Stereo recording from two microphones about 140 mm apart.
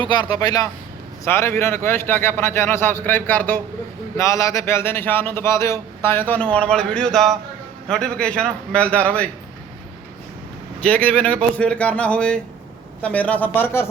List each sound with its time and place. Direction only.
0.1 s a man's voice: 30° left (ahead or behind); by 9.3 s 10° left (ahead or behind)
10.8 s a man's voice: 10° left (ahead or behind)